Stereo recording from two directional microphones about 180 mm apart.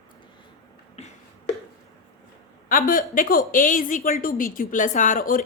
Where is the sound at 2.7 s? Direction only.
50° left (ahead or behind).